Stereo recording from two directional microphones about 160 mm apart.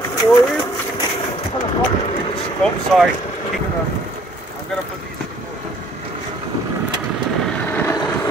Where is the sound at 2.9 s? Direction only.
Centre (ahead or behind).